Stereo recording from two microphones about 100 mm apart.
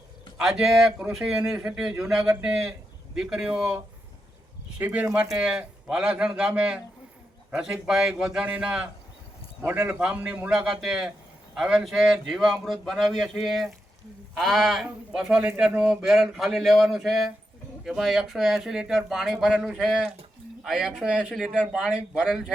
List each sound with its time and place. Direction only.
0.3 s a man's voice: 5° right (ahead or behind)
4.8 s a man's voice: 15° right (ahead or behind)
9.6 s speech: 20° right (ahead or behind)
10.0 s a man's voice: 10° right (ahead or behind)